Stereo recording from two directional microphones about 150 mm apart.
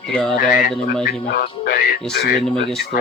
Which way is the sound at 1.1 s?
90° left.